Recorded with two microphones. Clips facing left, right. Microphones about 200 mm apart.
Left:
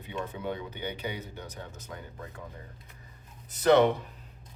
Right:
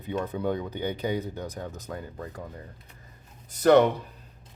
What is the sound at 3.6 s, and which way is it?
Speech, 45° right (ahead or behind).